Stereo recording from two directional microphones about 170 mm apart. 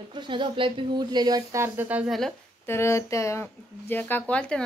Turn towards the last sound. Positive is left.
turn(degrees=5)  # may be behind; listen again after turning